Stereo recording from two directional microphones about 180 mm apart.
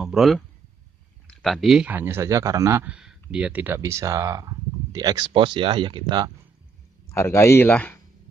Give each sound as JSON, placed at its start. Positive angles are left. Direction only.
{"t": 0.0, "sound": "a sound", "side_deg": 0}
{"t": 1.2, "sound": "a man's voice", "side_deg": 0}
{"t": 7.1, "sound": "speech", "side_deg": 15}